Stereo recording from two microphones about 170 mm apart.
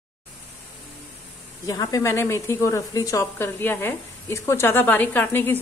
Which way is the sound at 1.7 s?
20° left (ahead or behind).